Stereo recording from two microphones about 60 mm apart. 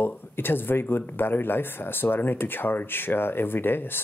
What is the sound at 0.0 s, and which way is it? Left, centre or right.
Speech, left.